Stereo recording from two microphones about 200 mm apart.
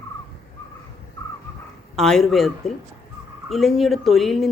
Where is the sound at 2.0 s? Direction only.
Centre (ahead or behind).